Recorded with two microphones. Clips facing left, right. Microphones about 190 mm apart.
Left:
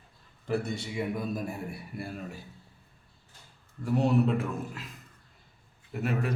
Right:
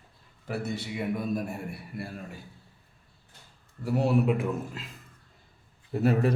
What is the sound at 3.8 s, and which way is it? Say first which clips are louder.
Speech: even; 5° right (ahead or behind).